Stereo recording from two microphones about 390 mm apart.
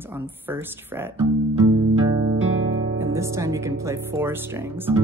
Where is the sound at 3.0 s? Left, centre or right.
Centre.